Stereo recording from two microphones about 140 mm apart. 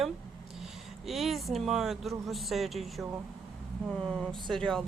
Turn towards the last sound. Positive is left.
turn(degrees=5)  # may be behind; listen again after turning